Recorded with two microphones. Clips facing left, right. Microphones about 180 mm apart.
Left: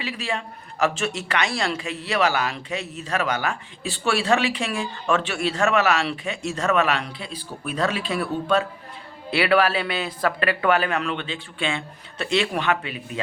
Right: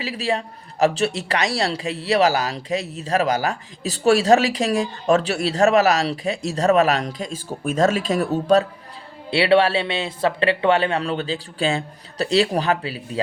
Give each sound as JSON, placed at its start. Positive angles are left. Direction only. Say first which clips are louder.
{"t": 0.0, "sound": "a man's voice", "louder": "right 5 dB", "side_deg": -35}
{"t": 9.3, "sound": "speech", "louder": "right 3 dB", "side_deg": -30}